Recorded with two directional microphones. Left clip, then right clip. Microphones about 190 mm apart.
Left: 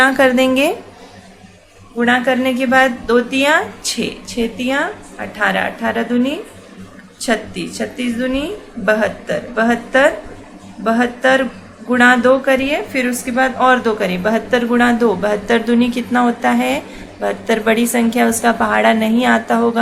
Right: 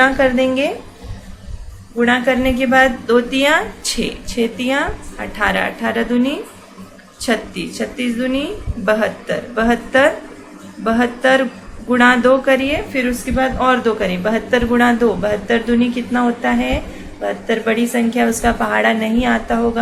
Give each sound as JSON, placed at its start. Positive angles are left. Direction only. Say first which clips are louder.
{"t": 0.0, "sound": "a woman's voice", "louder": "left 2 dB", "side_deg": 30}
{"t": 2.0, "sound": "a woman's voice", "louder": "even", "side_deg": 5}